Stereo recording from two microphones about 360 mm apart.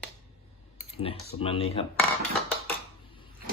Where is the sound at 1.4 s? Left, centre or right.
Centre.